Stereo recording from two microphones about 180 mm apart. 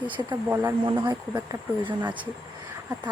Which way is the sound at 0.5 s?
10° right (ahead or behind).